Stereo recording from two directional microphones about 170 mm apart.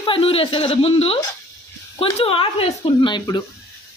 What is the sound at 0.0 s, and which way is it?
Speech, 30° left (ahead or behind).